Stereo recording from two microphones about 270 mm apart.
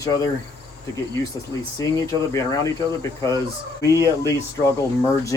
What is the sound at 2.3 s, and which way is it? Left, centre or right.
Speech, centre.